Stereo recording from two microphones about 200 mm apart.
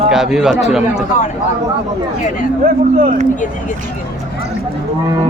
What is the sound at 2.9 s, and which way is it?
Speech, 40° right (ahead or behind).